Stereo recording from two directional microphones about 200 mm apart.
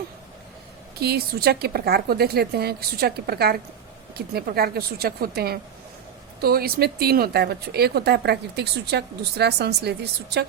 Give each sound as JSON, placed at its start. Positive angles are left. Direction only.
{"t": 0.9, "sound": "speech", "side_deg": -50}